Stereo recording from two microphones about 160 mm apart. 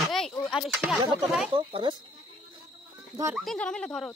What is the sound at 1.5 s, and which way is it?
Speech, 30° right (ahead or behind).